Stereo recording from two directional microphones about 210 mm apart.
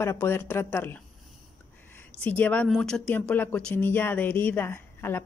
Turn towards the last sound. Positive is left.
turn(degrees=10)  # may be behind; listen again after turning